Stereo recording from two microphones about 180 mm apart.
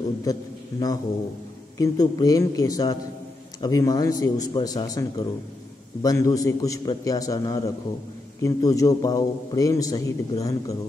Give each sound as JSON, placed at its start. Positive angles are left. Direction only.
{"t": 0.2, "sound": "a man's voice", "side_deg": 20}